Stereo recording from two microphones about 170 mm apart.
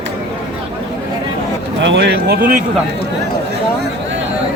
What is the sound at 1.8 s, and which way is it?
Speech, 90° right.